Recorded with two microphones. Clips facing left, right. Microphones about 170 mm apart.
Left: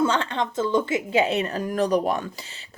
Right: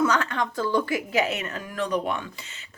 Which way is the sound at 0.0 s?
25° left (ahead or behind).